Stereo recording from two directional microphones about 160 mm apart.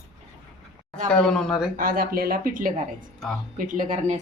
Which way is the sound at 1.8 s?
65° right (ahead or behind).